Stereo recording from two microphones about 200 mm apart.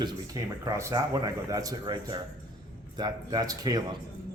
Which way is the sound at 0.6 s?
15° right (ahead or behind).